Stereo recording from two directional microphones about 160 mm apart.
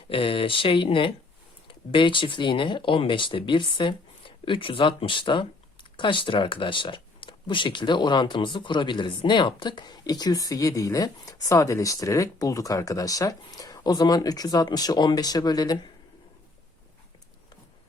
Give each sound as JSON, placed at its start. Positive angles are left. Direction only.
{"t": 0.1, "sound": "speech", "side_deg": 30}